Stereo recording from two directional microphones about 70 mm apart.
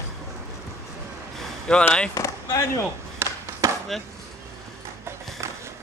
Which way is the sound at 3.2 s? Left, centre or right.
Right.